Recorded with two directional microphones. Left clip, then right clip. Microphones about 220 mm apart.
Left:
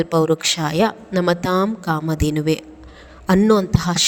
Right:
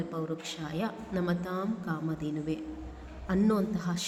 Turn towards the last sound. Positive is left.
turn(degrees=45)  # may be behind; listen again after turning